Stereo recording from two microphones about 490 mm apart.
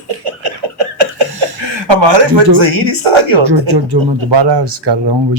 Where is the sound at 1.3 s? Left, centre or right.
Right.